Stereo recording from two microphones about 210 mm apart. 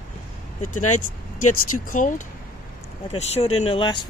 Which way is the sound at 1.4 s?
90° left.